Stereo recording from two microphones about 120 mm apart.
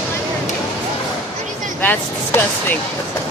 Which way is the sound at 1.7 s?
15° left (ahead or behind).